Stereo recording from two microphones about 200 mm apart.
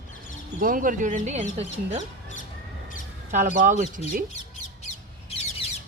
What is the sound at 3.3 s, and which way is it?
Speech, 40° right (ahead or behind).